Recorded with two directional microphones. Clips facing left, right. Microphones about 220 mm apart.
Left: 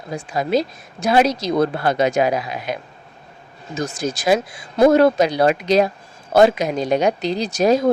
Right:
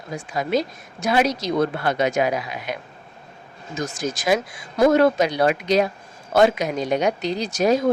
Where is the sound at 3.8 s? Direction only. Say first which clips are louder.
Left 3 dB; 30° left (ahead or behind).